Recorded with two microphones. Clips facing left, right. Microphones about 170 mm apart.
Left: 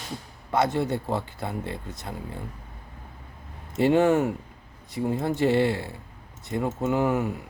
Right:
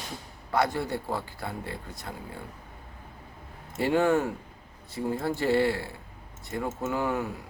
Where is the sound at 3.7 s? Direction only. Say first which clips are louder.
Left 4 dB; 20° left (ahead or behind).